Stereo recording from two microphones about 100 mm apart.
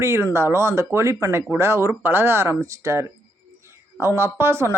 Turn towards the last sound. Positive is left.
turn(degrees=-25)  # may be behind; listen again after turning